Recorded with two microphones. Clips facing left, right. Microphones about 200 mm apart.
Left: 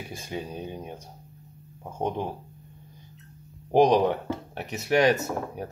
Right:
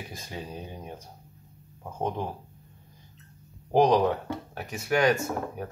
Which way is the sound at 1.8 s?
15° left (ahead or behind).